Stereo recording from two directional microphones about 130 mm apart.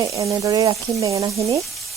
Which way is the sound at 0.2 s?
25° right (ahead or behind).